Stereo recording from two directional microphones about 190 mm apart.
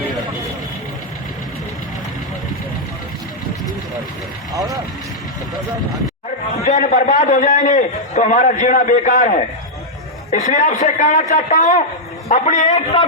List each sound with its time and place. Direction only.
6.7 s a man's voice: 40° left (ahead or behind)